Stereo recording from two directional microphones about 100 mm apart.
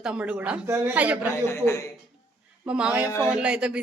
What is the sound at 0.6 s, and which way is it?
Speech, 25° right (ahead or behind).